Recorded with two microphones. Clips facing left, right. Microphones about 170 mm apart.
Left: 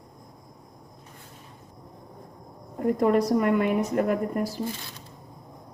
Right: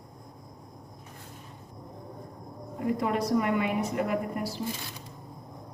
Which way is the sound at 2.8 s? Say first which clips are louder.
Left 6 dB; 45° left (ahead or behind).